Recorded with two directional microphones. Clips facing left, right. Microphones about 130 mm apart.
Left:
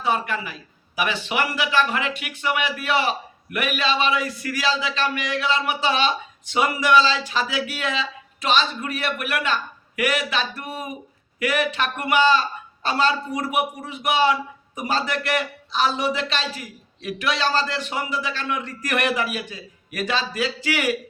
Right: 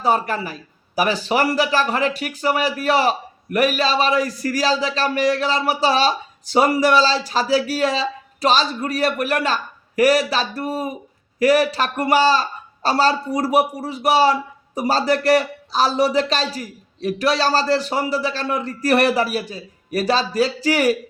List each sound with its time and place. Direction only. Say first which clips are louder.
0.0 s a man's voice: right 4 dB; 40° right (ahead or behind)